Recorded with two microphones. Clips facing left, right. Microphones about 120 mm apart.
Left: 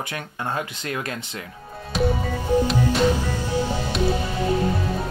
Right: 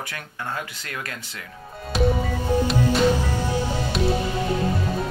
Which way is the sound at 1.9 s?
Centre (ahead or behind).